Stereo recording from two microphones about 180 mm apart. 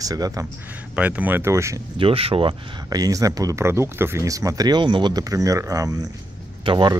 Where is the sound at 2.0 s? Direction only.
30° right (ahead or behind).